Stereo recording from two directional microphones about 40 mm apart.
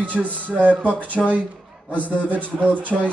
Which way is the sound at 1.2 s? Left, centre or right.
Centre.